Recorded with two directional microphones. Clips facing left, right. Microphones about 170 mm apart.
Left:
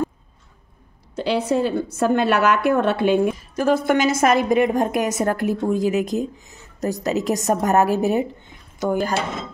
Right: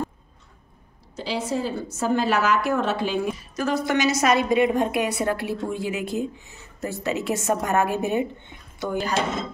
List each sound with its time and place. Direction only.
1.1 s a woman's voice: 60° left (ahead or behind); by 8.3 s 40° left (ahead or behind)
8.7 s speech: 50° left (ahead or behind)